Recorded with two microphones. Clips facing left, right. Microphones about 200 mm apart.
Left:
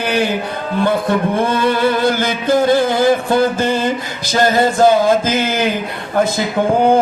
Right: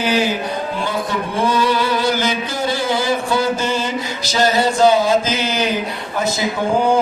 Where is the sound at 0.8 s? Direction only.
55° left (ahead or behind).